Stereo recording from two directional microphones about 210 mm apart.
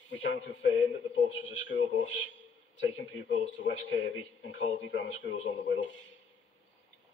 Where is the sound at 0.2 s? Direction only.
60° left (ahead or behind).